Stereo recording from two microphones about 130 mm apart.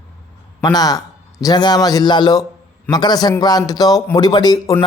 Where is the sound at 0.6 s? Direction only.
30° left (ahead or behind).